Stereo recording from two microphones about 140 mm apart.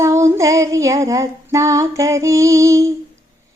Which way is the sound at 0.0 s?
20° right (ahead or behind).